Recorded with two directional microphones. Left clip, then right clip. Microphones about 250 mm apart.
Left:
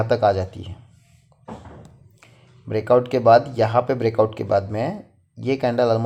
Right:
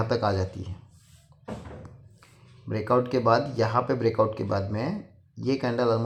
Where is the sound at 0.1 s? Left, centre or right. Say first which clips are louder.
Left 8 dB; left.